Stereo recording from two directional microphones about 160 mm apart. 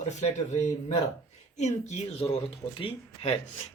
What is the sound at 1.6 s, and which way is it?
A man's voice, 45° left (ahead or behind).